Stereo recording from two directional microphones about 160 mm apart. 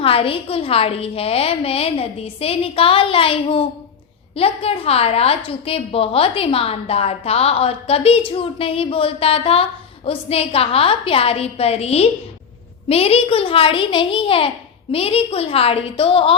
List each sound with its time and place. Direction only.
0.0 s a woman's voice: 35° left (ahead or behind)